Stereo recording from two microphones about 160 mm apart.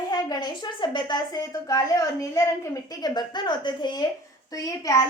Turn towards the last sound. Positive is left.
turn(degrees=20)  # may be behind; listen again after turning